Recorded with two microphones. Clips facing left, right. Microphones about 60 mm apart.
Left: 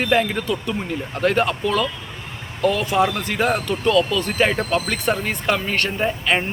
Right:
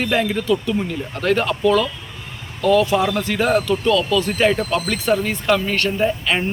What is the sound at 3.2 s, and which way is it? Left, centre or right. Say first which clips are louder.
A man's voice: right 3 dB; left.